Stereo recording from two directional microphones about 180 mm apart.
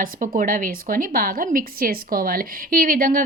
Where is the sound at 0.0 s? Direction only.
45° right (ahead or behind).